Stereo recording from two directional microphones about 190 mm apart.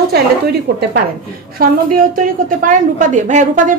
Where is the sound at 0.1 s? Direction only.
55° right (ahead or behind).